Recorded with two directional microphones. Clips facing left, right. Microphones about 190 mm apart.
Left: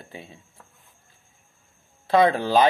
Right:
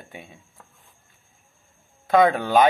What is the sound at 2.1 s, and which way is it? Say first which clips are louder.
Speech: right 1 dB; 30° left (ahead or behind).